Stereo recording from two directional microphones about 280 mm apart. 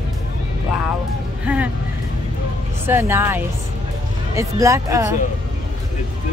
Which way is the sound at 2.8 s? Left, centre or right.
Centre.